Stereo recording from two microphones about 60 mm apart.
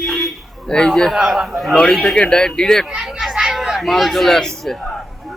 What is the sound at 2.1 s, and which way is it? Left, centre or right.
Speech, centre.